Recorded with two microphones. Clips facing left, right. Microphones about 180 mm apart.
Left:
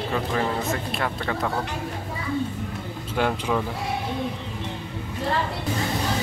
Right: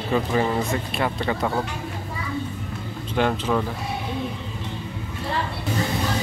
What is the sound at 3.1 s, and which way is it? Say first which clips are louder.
Speech: right 2 dB; 5° left (ahead or behind).